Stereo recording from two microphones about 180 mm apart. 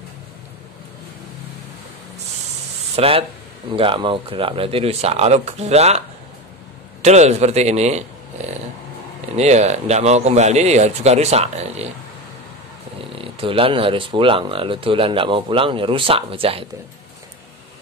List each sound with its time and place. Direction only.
3.0 s speech: 35° right (ahead or behind)
9.4 s speech: 40° right (ahead or behind)
13.1 s speech: 30° right (ahead or behind)